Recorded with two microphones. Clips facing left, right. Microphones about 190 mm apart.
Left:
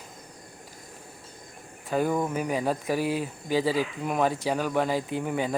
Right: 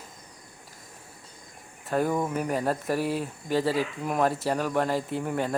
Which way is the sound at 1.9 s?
Centre (ahead or behind).